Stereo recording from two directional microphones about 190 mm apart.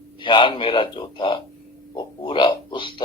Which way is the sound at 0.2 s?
25° left (ahead or behind).